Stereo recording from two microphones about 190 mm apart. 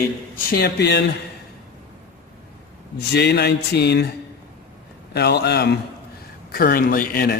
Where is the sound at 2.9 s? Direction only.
60° left (ahead or behind).